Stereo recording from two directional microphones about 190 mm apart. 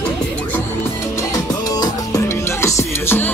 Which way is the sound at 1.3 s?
20° left (ahead or behind).